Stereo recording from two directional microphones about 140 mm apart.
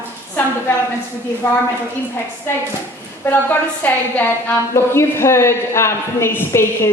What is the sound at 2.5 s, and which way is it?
A man's voice, 15° left (ahead or behind).